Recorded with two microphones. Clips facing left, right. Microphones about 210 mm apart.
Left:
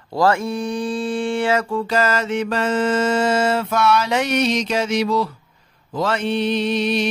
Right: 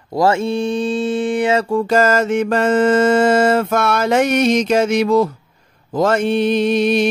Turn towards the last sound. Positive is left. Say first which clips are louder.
# right 5 dB
turn(degrees=-50)  # may be behind; listen again after turning